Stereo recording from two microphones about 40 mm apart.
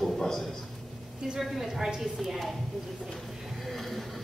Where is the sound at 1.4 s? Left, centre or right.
Centre.